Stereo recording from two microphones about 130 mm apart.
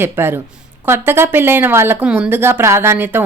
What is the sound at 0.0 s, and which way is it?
Speech, 15° right (ahead or behind).